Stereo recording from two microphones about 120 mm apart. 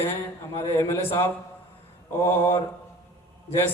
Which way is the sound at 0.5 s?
20° left (ahead or behind).